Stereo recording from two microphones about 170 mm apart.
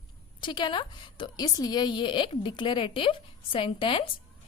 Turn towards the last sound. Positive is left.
turn(degrees=30)  # may be behind; listen again after turning